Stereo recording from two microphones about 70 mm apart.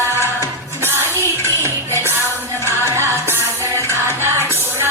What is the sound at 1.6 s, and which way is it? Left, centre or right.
Music, right.